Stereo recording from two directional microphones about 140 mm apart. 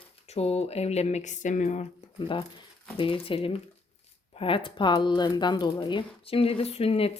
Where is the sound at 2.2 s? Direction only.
35° left (ahead or behind).